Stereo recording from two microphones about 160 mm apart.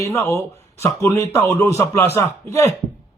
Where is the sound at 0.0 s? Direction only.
15° left (ahead or behind).